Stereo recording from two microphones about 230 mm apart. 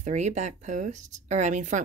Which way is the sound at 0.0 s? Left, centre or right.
Right.